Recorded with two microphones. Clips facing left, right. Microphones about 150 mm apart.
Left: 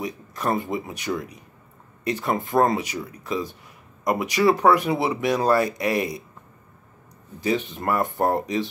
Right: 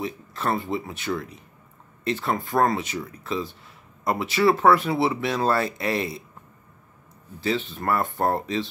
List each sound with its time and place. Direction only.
0.0 s speech: 15° left (ahead or behind)
7.3 s speech: 15° left (ahead or behind)